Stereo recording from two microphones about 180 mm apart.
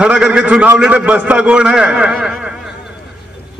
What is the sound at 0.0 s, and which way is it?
A man's voice, 5° right (ahead or behind).